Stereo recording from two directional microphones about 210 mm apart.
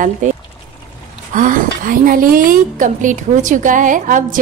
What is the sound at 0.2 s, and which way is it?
A woman's voice, 35° right (ahead or behind).